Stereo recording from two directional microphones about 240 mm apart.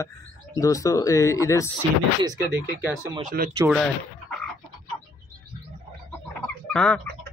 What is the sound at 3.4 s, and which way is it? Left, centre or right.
Speech, right.